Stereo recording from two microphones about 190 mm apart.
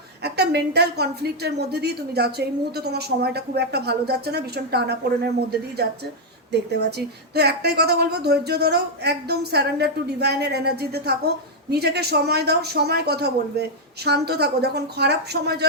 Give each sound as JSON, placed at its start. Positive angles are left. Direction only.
{"t": 0.2, "sound": "a woman's voice", "side_deg": -60}
{"t": 7.3, "sound": "a woman's voice", "side_deg": -60}